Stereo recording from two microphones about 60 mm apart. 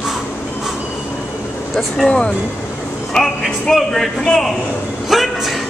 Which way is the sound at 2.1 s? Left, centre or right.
Centre.